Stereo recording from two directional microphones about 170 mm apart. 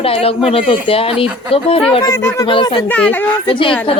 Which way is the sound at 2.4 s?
30° left (ahead or behind).